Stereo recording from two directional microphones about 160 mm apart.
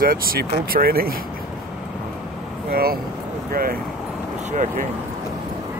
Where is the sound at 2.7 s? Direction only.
70° right (ahead or behind).